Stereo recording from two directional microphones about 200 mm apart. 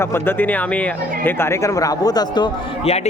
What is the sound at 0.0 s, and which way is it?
Speech, 10° left (ahead or behind).